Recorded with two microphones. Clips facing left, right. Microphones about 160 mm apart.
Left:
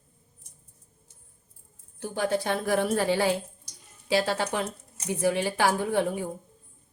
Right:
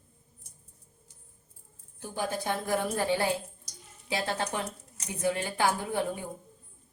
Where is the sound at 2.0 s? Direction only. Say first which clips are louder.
Left 6 dB; 80° left.